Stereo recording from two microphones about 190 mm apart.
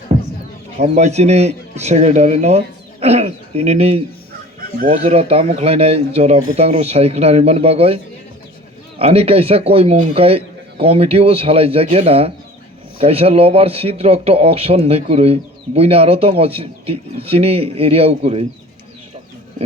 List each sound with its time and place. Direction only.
0.8 s a man's voice: 35° right (ahead or behind)
9.0 s a man's voice: 30° right (ahead or behind)